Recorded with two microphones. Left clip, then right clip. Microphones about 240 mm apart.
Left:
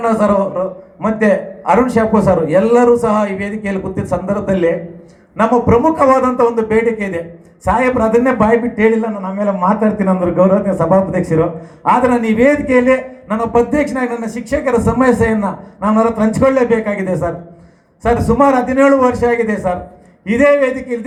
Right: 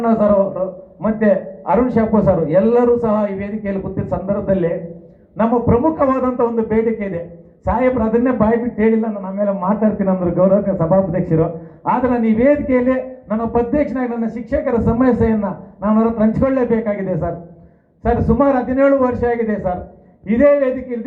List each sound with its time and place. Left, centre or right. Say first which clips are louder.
0.0 s a man's voice: left 1 dB; left